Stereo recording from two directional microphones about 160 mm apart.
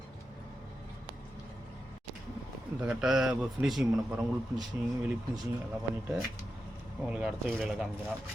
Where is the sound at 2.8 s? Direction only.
5° right (ahead or behind).